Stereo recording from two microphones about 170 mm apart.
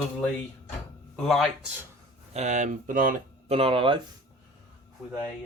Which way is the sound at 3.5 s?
35° right (ahead or behind).